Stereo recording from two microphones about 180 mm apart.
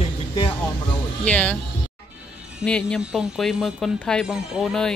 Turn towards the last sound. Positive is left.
turn(degrees=5)  # may be behind; listen again after turning